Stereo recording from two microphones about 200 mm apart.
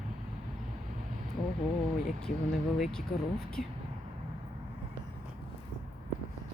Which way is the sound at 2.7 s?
Centre (ahead or behind).